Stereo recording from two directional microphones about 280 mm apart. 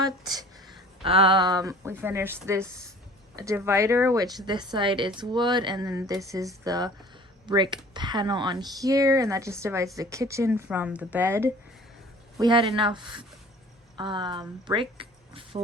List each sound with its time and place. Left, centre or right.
0.0 s speech: centre